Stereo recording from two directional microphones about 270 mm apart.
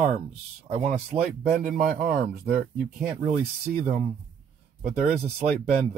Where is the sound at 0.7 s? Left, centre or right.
Right.